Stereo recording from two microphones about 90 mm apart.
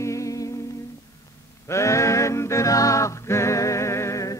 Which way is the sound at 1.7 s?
35° left (ahead or behind).